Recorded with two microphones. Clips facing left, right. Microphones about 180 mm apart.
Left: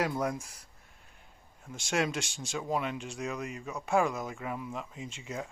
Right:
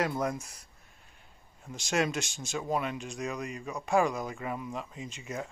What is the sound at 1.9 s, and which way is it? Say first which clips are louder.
Speech: right 1 dB; 10° left (ahead or behind).